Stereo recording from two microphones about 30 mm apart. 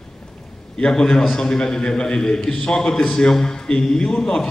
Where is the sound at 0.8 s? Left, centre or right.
Left.